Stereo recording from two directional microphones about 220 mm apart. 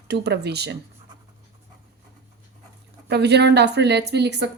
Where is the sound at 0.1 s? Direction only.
50° right (ahead or behind).